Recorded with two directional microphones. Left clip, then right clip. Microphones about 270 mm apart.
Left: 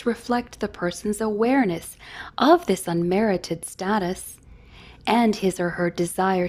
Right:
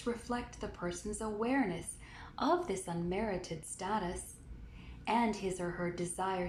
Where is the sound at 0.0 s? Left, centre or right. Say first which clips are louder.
Left 13 dB; left.